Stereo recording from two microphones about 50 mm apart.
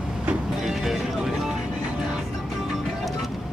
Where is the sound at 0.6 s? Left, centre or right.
Centre.